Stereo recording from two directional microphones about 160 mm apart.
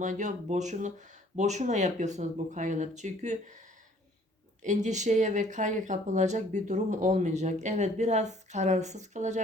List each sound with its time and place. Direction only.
0.0 s speech: 50° right (ahead or behind)
4.6 s speech: 50° right (ahead or behind)